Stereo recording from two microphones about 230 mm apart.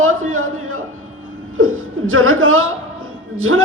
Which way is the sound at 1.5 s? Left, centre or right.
Right.